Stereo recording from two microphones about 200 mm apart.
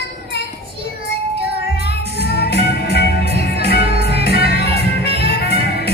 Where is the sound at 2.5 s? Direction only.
55° left (ahead or behind).